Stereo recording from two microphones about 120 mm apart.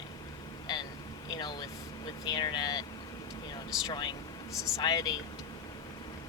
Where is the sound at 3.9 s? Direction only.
40° left (ahead or behind).